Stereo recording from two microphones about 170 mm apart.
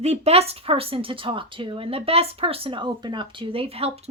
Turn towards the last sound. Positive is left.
turn(degrees=-35)  # may be behind; listen again after turning